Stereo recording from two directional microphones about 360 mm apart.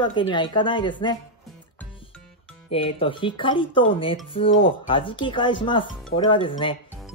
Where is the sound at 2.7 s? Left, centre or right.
Centre.